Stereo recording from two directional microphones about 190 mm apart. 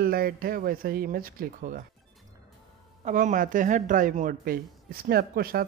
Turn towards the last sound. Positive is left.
turn(degrees=-50)  # may be behind; listen again after turning